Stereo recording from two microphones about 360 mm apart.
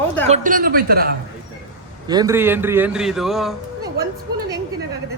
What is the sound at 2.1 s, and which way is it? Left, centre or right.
A man's voice, centre.